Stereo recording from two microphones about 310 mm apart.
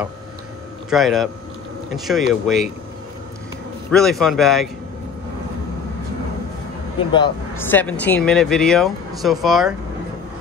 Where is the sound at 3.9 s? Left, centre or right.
Centre.